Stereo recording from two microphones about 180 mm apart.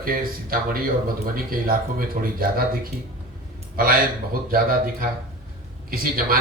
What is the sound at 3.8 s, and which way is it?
A man's voice, 55° right (ahead or behind).